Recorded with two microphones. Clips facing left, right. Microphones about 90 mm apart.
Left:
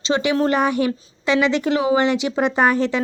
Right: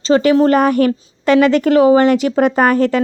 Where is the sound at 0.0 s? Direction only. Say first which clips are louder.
Right 8 dB; 40° right (ahead or behind).